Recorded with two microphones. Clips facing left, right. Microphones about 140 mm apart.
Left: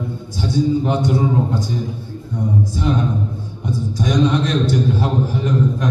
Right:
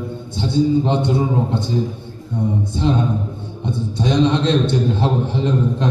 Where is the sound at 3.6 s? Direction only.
25° right (ahead or behind).